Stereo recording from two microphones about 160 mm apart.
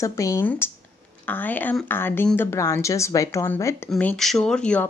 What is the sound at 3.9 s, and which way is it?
Speech, 5° left (ahead or behind).